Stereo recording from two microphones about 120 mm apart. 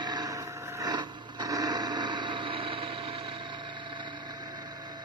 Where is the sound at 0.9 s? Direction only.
35° right (ahead or behind).